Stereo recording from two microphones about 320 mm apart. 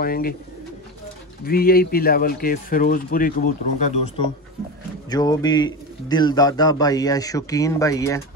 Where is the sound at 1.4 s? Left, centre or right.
Left.